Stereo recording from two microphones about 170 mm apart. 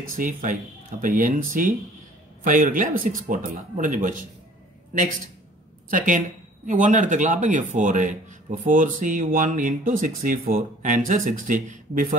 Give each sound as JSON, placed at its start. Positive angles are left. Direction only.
{"t": 0.1, "sound": "speech", "side_deg": -50}
{"t": 5.9, "sound": "speech", "side_deg": -50}